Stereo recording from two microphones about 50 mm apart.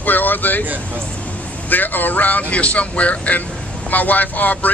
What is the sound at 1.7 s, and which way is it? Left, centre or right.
Speech, left.